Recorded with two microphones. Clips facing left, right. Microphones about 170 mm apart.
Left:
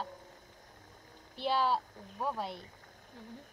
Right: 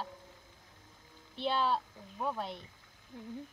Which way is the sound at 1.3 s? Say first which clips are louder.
Left 1 dB; 5° left (ahead or behind).